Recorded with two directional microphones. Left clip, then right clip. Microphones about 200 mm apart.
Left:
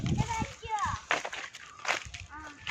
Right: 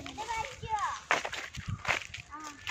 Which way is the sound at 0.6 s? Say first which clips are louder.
Left 1 dB; 5° left (ahead or behind).